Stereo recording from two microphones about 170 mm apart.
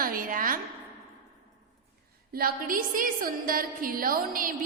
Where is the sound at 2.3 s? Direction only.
60° right (ahead or behind).